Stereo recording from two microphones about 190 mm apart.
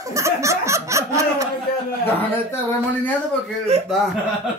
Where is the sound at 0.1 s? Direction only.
15° right (ahead or behind).